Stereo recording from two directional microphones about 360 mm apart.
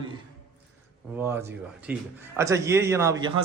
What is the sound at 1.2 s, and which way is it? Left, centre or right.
A man's voice, centre.